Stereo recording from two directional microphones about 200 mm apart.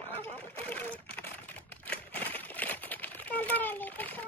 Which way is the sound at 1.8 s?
10° left (ahead or behind).